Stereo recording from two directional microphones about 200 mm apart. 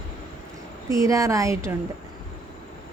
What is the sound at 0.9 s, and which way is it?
Speech, 15° right (ahead or behind).